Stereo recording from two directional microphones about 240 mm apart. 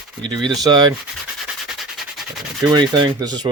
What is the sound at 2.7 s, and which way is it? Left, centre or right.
Sanding, centre.